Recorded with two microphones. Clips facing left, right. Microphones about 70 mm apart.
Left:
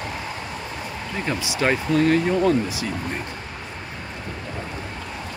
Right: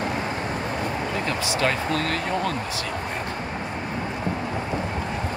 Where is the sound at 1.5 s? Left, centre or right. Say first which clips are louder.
Left 5 dB; centre.